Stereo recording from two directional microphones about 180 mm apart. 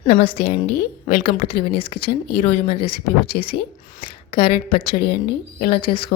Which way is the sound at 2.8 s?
55° left (ahead or behind).